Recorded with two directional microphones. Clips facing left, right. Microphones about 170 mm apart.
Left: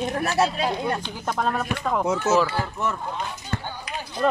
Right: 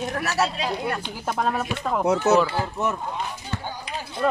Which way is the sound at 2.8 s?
20° right (ahead or behind).